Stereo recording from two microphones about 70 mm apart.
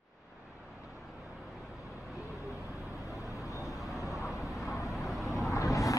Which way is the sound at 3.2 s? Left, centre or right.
Left.